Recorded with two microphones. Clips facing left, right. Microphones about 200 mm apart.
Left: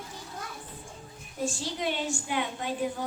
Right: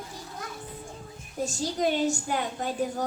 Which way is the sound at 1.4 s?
40° right (ahead or behind).